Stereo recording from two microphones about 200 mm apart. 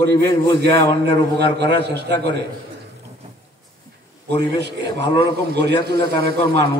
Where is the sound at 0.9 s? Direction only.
60° right (ahead or behind).